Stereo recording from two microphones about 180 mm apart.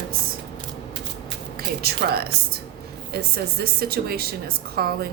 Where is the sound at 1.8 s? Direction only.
60° right (ahead or behind).